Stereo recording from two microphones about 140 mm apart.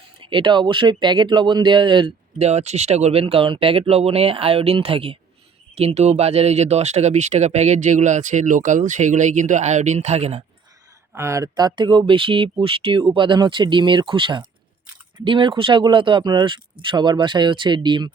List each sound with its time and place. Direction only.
0.2 s speech: 35° right (ahead or behind)
2.4 s speech: 50° right (ahead or behind)
11.1 s speech: 20° right (ahead or behind)